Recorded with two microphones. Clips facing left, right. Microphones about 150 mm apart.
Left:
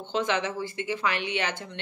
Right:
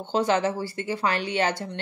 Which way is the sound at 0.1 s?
40° right (ahead or behind).